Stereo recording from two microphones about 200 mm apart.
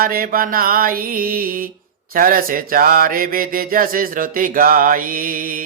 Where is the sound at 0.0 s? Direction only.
45° right (ahead or behind).